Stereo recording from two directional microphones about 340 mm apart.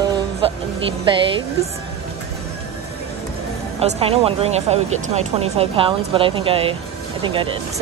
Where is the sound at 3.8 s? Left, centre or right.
Centre.